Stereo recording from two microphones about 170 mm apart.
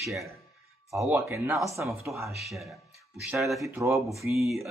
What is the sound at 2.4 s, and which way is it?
Speech, centre (ahead or behind).